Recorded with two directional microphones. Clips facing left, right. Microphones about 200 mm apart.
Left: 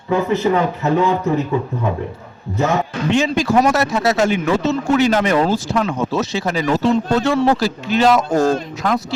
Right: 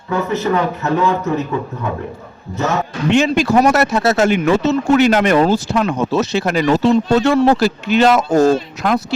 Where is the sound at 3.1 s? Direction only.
70° right (ahead or behind).